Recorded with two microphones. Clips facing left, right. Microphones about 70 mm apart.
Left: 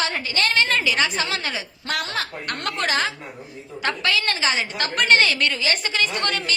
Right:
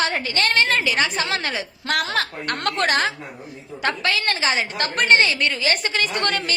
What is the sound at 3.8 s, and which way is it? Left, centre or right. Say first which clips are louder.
A woman's voice: right 1 dB; right.